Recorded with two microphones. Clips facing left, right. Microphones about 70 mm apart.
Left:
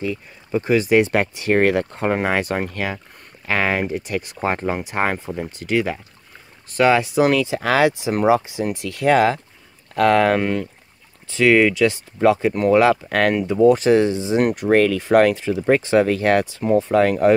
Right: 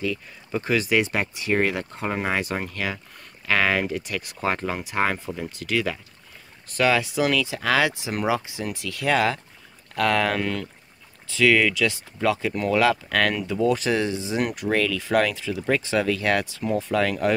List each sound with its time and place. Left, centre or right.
0.5 s speech: left
1.0 s speech: left
2.6 s speech: left